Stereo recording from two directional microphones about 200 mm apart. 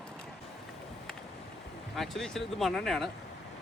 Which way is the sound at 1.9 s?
Centre (ahead or behind).